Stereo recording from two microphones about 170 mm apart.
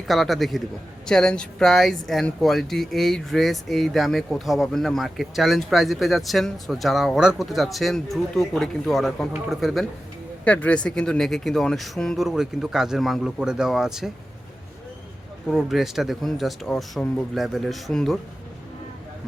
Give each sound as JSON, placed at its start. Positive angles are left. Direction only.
{"t": 0.1, "sound": "speech", "side_deg": 0}
{"t": 15.4, "sound": "speech", "side_deg": 0}